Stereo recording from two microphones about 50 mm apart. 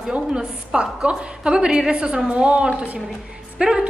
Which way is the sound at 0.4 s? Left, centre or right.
Centre.